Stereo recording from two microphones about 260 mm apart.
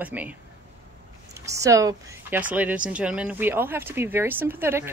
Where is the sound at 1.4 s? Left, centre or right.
Centre.